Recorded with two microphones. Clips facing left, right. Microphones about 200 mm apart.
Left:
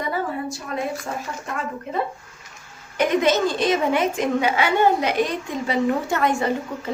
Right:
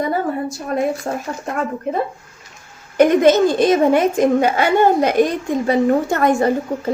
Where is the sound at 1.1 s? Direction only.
45° right (ahead or behind).